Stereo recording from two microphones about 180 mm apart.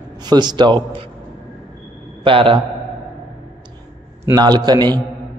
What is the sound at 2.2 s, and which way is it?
Speech, 30° right (ahead or behind).